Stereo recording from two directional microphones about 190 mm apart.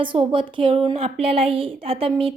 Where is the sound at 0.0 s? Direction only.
25° right (ahead or behind).